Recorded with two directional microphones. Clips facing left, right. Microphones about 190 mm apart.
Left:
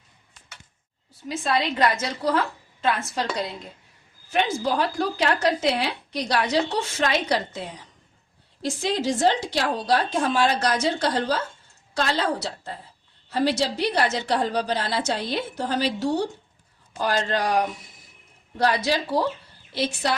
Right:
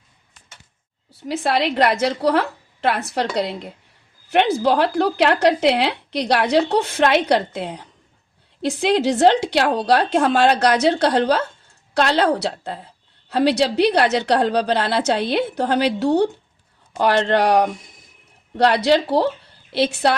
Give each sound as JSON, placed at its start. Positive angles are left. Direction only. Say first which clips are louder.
{"t": 1.3, "sound": "a woman's voice", "louder": "right 5 dB", "side_deg": -70}